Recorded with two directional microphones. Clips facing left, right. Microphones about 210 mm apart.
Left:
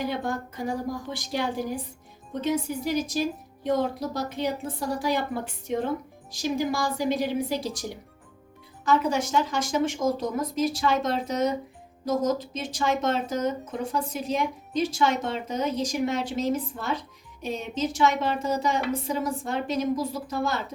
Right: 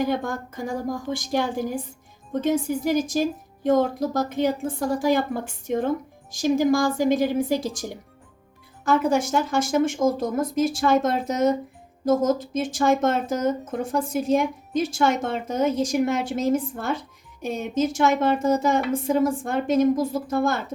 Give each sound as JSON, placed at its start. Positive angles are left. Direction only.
{"t": 0.0, "sound": "speech", "side_deg": -45}
{"t": 6.3, "sound": "speech", "side_deg": -45}